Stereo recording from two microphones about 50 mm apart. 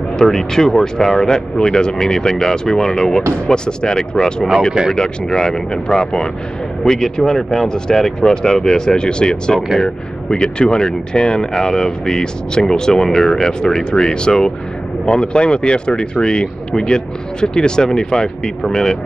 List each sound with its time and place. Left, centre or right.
0.2 s speech: centre